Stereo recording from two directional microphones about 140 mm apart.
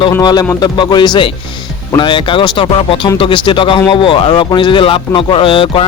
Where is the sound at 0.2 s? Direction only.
30° left (ahead or behind).